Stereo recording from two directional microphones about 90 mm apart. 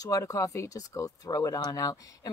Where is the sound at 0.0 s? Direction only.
40° left (ahead or behind).